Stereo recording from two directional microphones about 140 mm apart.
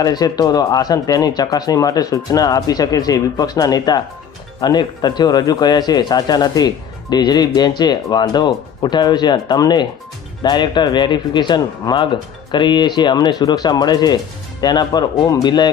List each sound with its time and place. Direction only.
0.0 s speech: 25° left (ahead or behind)